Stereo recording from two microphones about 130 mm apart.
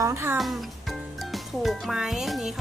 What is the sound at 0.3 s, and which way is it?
Speech, centre (ahead or behind).